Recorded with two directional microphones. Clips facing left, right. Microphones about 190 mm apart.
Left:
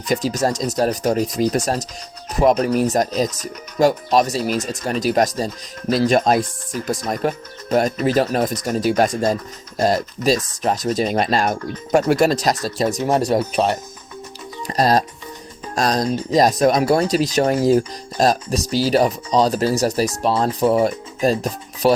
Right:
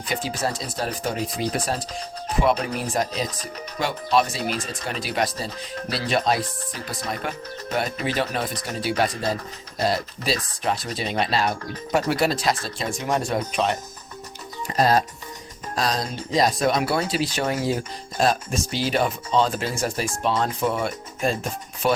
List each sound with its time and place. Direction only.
0.1 s speech: 40° left (ahead or behind)